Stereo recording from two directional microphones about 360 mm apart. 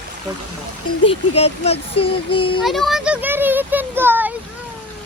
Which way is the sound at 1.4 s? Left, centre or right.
Centre.